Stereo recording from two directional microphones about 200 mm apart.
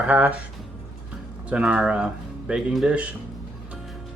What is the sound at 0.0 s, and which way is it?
Speech, 5° right (ahead or behind).